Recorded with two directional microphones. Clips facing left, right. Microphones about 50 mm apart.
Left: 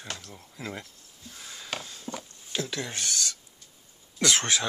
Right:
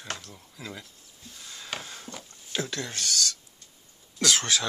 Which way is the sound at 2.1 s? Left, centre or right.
Left.